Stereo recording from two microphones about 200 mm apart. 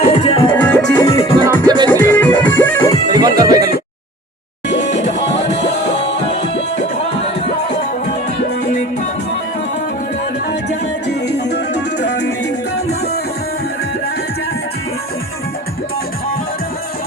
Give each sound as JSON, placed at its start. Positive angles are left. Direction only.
{"t": 0.0, "sound": "music", "side_deg": 30}
{"t": 0.5, "sound": "music", "side_deg": 10}
{"t": 0.9, "sound": "music", "side_deg": 25}
{"t": 1.5, "sound": "music", "side_deg": -20}
{"t": 1.9, "sound": "music", "side_deg": 10}
{"t": 3.1, "sound": "music", "side_deg": -20}
{"t": 4.7, "sound": "music", "side_deg": 35}
{"t": 10.5, "sound": "music", "side_deg": 55}